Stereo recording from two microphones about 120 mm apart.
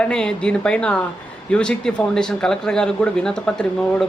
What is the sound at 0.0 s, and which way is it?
Speech, 5° left (ahead or behind).